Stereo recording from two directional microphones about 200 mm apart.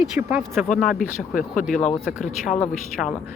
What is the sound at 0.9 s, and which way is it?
Speech, 40° left (ahead or behind).